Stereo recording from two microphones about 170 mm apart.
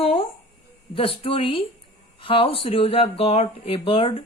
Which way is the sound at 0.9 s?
35° left (ahead or behind).